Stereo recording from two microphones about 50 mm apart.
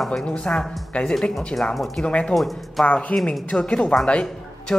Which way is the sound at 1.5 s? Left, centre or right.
Left.